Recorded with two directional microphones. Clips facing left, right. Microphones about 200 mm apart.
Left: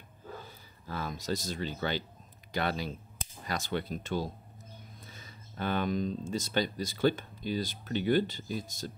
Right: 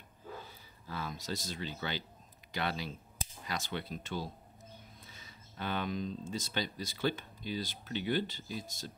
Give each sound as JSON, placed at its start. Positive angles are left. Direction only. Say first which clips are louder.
{"t": 0.8, "sound": "speech", "louder": "left 5 dB", "side_deg": 45}